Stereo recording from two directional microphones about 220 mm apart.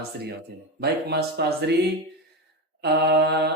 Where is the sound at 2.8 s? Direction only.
50° right (ahead or behind).